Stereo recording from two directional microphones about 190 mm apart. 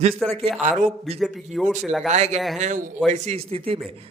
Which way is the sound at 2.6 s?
40° right (ahead or behind).